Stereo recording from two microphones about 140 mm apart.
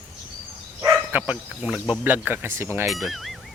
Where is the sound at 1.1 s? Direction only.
10° right (ahead or behind).